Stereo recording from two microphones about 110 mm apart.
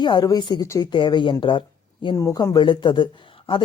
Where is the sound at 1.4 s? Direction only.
50° left (ahead or behind).